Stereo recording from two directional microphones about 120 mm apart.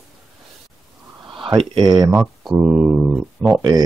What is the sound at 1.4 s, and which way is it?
Speech, 40° right (ahead or behind).